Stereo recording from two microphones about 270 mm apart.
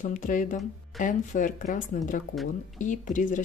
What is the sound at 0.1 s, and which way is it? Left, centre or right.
Speech, left.